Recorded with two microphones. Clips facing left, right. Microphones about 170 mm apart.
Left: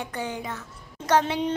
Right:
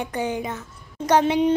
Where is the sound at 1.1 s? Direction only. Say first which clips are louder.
Right 5 dB; 15° right (ahead or behind).